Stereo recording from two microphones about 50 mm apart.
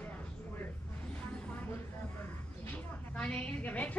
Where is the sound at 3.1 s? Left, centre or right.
Left.